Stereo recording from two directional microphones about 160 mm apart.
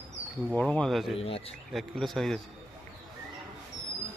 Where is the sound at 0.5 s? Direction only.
5° left (ahead or behind).